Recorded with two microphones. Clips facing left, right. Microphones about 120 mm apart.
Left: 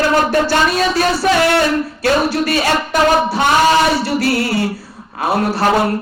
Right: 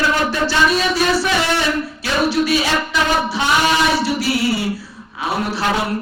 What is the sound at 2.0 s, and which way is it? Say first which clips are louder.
Speech: left 2 dB; 55° left (ahead or behind).